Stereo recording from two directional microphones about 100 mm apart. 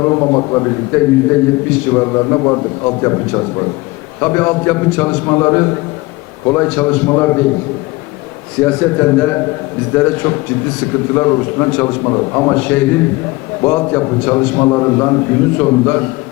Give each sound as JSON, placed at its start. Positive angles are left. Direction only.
{"t": 0.0, "sound": "a man's voice", "side_deg": 25}
{"t": 8.6, "sound": "a man's voice", "side_deg": 20}